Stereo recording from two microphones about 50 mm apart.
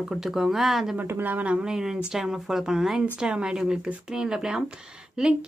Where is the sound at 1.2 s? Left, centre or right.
Right.